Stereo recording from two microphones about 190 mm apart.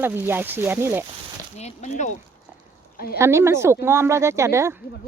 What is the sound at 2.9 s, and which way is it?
Speech, 55° left (ahead or behind).